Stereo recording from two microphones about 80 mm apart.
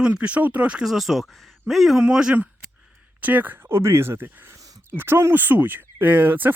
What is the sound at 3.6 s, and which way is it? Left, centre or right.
Speech, right.